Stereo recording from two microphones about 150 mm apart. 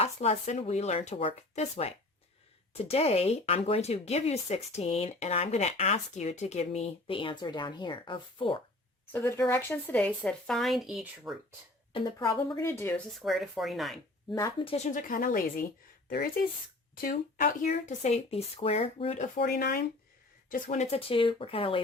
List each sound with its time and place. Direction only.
0.0 s speech: 45° left (ahead or behind)
9.1 s speech: 15° left (ahead or behind); by 11.3 s 5° right (ahead or behind)
12.2 s speech: 20° left (ahead or behind)
13.1 s speech: centre (ahead or behind)
14.6 s speech: 40° left (ahead or behind)
14.8 s a woman's voice: 60° left (ahead or behind); by 19.2 s 40° left (ahead or behind)
19.2 s speech: 90° left
20.5 s speech: 55° left (ahead or behind)
21.1 s speech: 35° left (ahead or behind)